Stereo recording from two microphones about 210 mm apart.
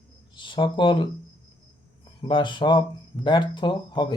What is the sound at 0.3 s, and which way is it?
Speech, 25° left (ahead or behind).